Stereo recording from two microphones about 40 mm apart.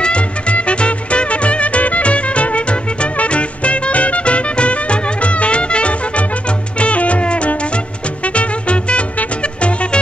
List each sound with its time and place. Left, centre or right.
0.0 s music: left